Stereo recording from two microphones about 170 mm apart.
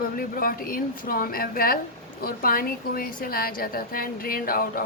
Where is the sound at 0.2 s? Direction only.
55° left (ahead or behind).